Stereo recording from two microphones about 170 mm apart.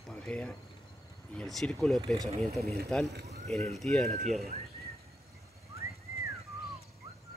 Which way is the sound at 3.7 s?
5° left (ahead or behind).